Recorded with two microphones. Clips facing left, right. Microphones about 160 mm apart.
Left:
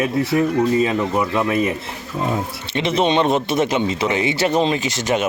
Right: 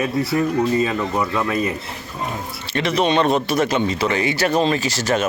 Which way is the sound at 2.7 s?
25° left (ahead or behind).